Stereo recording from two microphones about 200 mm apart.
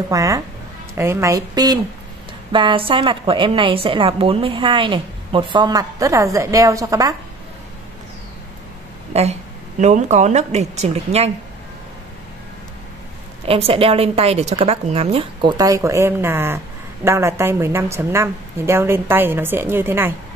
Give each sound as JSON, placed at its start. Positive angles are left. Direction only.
{"t": 0.1, "sound": "a woman's voice", "side_deg": -15}
{"t": 9.1, "sound": "a woman's voice", "side_deg": -35}
{"t": 13.5, "sound": "a woman's voice", "side_deg": -30}